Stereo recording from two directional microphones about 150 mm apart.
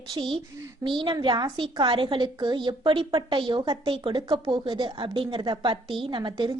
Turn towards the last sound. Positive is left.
turn(degrees=-30)  # may be behind; listen again after turning